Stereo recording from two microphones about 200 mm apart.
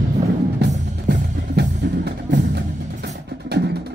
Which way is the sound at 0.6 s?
55° right (ahead or behind).